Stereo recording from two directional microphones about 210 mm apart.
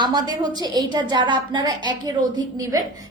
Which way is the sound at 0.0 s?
20° right (ahead or behind).